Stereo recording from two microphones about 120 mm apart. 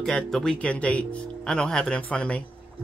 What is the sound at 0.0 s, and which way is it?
Speech, 5° left (ahead or behind).